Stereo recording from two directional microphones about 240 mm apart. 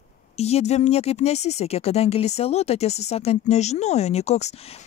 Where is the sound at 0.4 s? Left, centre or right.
Left.